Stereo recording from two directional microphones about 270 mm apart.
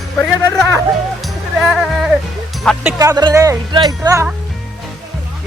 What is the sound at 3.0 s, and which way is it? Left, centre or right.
Speech, centre.